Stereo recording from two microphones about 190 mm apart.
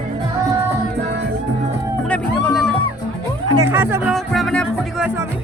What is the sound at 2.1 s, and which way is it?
Music, 5° left (ahead or behind).